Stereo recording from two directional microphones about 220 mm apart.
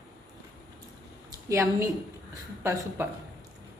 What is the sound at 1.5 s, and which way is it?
Speech, 10° right (ahead or behind).